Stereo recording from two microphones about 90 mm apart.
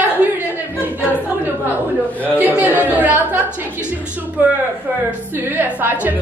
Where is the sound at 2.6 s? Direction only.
20° right (ahead or behind).